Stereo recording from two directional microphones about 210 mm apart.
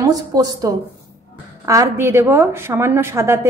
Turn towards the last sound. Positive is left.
turn(degrees=-10)  # may be behind; listen again after turning